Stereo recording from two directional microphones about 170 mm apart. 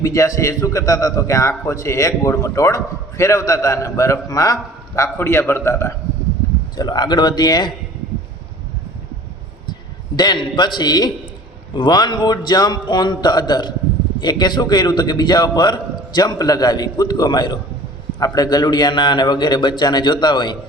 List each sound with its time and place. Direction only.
0.0 s a man's voice: 20° left (ahead or behind)
10.2 s a man's voice: 25° left (ahead or behind)